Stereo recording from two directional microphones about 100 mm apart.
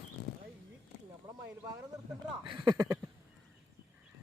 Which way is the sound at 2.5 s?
50° right (ahead or behind).